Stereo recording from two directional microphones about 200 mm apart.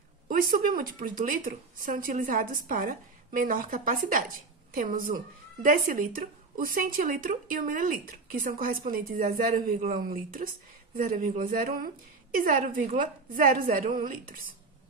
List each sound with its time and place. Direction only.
0.3 s a woman's voice: 45° right (ahead or behind)